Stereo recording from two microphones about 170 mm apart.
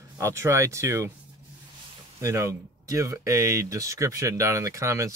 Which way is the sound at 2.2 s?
15° right (ahead or behind).